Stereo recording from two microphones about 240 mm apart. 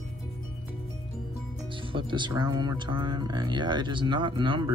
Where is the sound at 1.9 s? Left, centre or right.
Centre.